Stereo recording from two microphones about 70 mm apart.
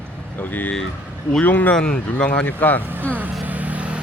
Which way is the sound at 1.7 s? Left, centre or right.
Centre.